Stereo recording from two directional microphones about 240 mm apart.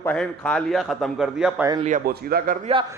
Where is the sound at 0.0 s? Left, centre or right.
Centre.